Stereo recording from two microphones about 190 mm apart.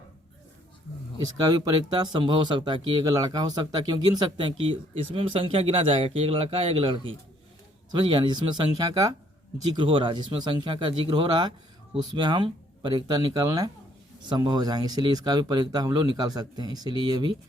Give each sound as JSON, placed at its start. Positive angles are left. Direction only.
{"t": 1.9, "sound": "speech", "side_deg": -25}